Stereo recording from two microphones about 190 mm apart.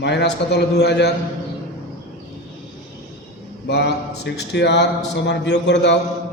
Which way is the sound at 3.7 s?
60° left (ahead or behind).